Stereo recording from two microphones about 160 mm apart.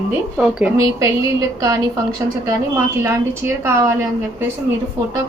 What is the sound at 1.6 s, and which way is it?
Speech, 20° right (ahead or behind).